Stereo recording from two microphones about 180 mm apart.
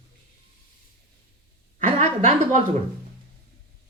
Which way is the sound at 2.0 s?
40° right (ahead or behind).